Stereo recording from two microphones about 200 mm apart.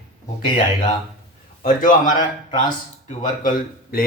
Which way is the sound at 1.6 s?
45° left (ahead or behind).